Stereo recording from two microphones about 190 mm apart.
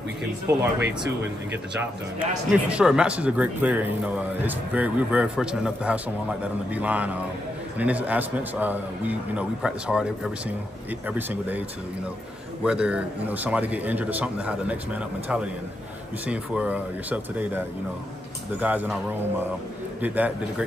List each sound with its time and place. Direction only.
0.5 s speech: 15° right (ahead or behind)
1.7 s speech: 5° right (ahead or behind)
11.1 s speech: 10° right (ahead or behind)
12.6 s speech: 5° right (ahead or behind)
20.0 s speech: 10° right (ahead or behind)